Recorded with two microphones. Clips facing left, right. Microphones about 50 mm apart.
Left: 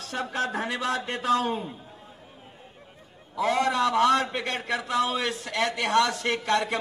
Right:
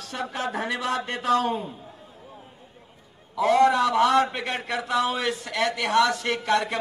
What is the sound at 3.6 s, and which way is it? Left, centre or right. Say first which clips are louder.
Speech: right 3 dB; right.